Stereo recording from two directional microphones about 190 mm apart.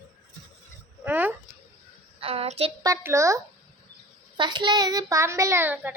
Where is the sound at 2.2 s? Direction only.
30° right (ahead or behind).